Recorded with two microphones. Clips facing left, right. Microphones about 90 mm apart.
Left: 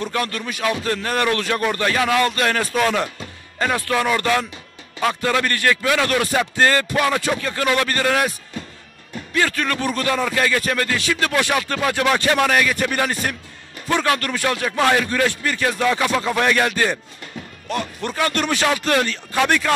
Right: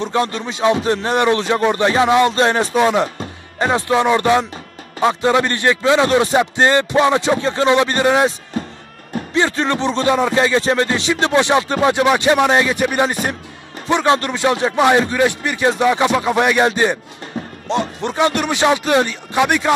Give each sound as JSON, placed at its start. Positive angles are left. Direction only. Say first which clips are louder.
{"t": 0.0, "sound": "speech", "louder": "right 5 dB", "side_deg": -25}
{"t": 9.3, "sound": "speech", "louder": "right 4 dB", "side_deg": -25}